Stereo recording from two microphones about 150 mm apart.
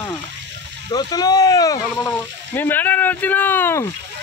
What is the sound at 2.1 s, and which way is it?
Speech, 15° left (ahead or behind).